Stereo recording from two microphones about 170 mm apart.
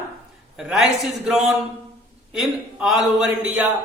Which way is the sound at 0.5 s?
5° right (ahead or behind).